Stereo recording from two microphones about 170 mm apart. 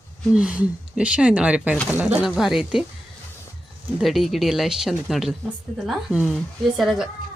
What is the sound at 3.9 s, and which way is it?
Speech, centre (ahead or behind).